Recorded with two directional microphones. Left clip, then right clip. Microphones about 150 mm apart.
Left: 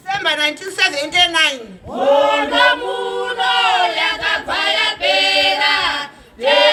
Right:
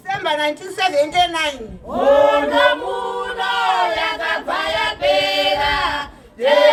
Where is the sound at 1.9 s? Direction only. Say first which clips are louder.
Right 1 dB; 20° right (ahead or behind).